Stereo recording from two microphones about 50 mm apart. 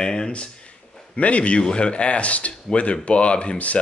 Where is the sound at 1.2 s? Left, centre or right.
Left.